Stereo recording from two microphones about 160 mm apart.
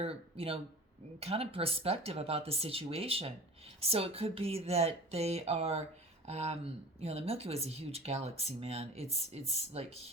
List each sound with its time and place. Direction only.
0.0 s speech: 40° right (ahead or behind)